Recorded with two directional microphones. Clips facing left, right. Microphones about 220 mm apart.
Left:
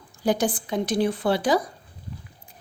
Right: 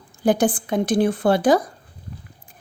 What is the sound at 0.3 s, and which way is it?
A woman's voice, 50° right (ahead or behind).